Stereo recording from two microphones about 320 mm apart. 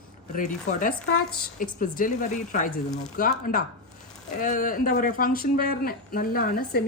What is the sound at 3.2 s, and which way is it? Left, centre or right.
Speech, left.